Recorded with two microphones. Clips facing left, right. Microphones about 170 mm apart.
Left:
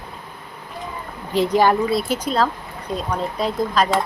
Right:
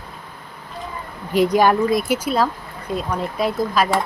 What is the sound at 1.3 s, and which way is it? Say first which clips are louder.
Speech: right 1 dB; 10° right (ahead or behind).